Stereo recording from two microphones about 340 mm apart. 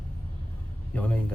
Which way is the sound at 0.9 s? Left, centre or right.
Centre.